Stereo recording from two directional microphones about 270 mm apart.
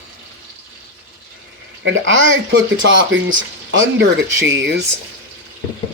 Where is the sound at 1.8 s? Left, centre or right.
Right.